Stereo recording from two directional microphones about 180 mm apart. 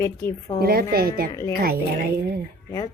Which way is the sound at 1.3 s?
15° left (ahead or behind).